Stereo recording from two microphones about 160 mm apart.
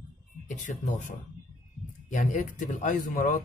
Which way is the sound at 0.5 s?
50° left (ahead or behind).